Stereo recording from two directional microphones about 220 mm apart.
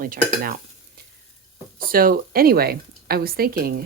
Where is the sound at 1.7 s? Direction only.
40° right (ahead or behind).